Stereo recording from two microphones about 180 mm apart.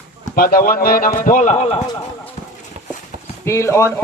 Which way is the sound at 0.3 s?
55° left (ahead or behind).